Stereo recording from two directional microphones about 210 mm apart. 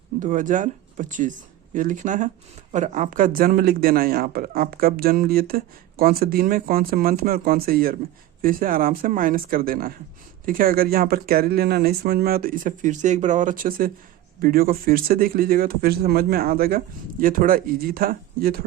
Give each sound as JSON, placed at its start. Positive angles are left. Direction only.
{"t": 0.2, "sound": "speech", "side_deg": -40}